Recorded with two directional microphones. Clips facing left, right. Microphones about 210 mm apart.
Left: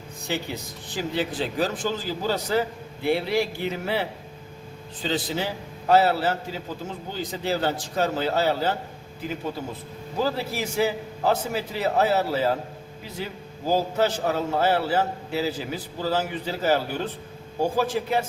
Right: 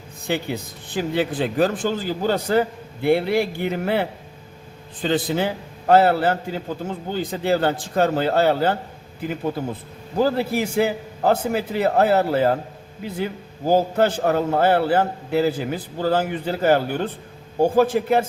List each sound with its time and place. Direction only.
0.3 s a man's voice: 55° right (ahead or behind)
5.0 s a man's voice: 55° right (ahead or behind)
10.2 s a man's voice: 55° right (ahead or behind)